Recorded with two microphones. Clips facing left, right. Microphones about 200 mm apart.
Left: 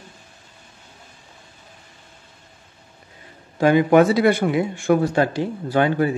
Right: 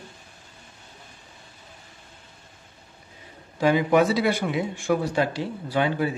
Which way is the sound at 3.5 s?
55° left (ahead or behind).